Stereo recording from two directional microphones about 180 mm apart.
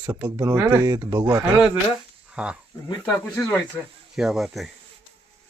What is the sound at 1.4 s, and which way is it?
Speech, 10° right (ahead or behind).